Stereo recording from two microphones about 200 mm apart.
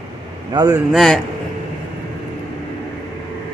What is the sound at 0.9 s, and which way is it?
Speech, centre (ahead or behind).